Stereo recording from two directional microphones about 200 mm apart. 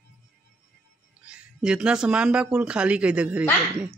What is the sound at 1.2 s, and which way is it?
Speech, 5° right (ahead or behind).